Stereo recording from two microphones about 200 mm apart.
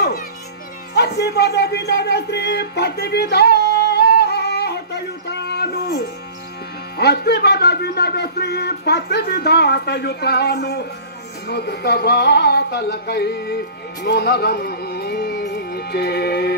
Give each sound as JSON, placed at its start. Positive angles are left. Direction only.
{"t": 0.9, "sound": "a sound", "side_deg": 55}
{"t": 7.0, "sound": "speech", "side_deg": 55}
{"t": 14.0, "sound": "music", "side_deg": 55}